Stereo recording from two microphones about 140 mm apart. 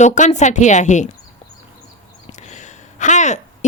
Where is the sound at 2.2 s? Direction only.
55° left (ahead or behind).